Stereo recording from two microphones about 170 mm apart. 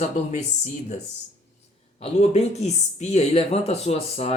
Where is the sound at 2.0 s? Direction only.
40° left (ahead or behind).